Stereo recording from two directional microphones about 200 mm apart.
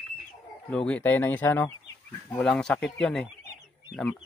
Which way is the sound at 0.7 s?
5° left (ahead or behind).